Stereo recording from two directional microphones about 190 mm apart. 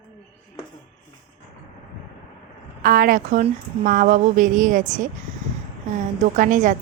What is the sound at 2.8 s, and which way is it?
A woman's voice, 50° right (ahead or behind).